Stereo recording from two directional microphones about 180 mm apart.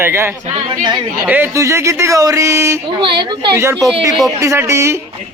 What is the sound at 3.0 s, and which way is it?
A man's voice, 25° right (ahead or behind).